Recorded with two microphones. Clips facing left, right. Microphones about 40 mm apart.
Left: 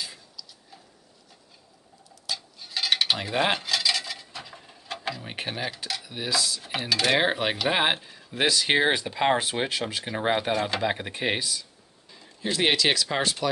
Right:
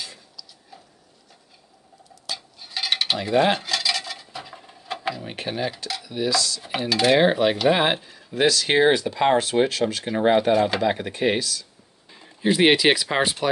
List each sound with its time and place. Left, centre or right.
0.0 s printer: centre
2.2 s a sound: centre
3.2 s dishes: centre
5.2 s cutlery: centre
6.0 s speech: centre
6.6 s cutlery: centre
7.2 s speech: centre
10.0 s cutlery: centre
10.8 s speech: centre
12.1 s speech: centre